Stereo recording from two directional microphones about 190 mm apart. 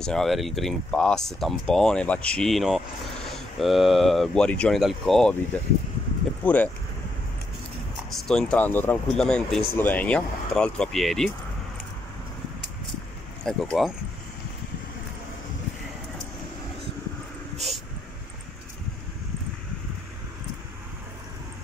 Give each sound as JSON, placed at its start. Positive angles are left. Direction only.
{"t": 0.0, "sound": "speech", "side_deg": 0}
{"t": 8.1, "sound": "speech", "side_deg": 0}
{"t": 13.4, "sound": "speech", "side_deg": 5}